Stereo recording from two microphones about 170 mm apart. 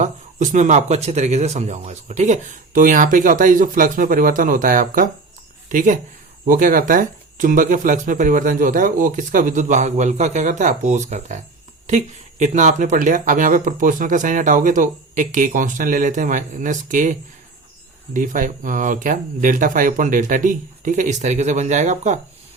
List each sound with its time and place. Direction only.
0.0 s speech: 45° right (ahead or behind)